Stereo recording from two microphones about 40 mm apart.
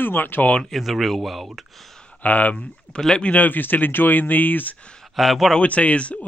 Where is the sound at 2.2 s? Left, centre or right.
Left.